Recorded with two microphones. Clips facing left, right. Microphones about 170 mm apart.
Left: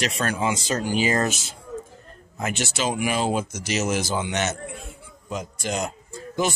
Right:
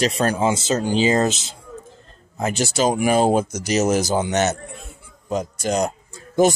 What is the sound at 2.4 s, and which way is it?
Speech, 35° right (ahead or behind).